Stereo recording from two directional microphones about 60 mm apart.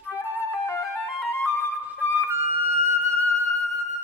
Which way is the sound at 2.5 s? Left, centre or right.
Right.